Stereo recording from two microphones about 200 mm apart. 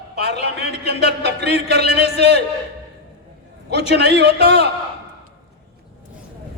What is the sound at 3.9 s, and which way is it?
Speech, 55° right (ahead or behind).